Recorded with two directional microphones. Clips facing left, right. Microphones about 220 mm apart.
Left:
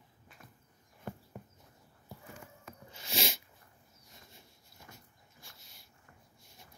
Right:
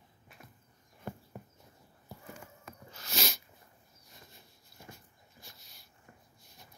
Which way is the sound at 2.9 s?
25° left (ahead or behind).